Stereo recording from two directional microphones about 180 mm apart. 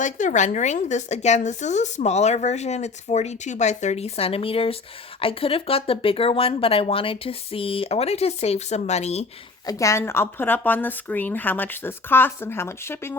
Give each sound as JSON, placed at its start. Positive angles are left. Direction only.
{"t": 0.0, "sound": "speech", "side_deg": 45}
{"t": 9.6, "sound": "speech", "side_deg": 20}